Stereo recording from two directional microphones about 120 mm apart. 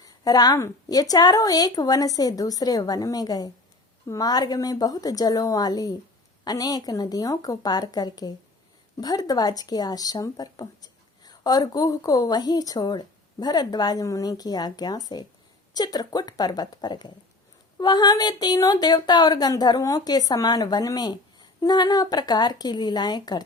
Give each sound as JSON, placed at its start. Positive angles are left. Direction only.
{"t": 0.0, "sound": "speech", "side_deg": 30}